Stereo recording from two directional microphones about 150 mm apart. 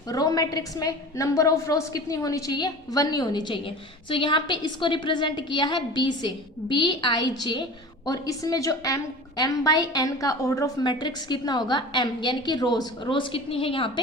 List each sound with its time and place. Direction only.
0.1 s a woman's voice: 25° left (ahead or behind)